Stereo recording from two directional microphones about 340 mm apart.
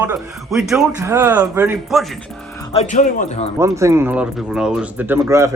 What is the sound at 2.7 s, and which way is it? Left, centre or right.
Speech, left.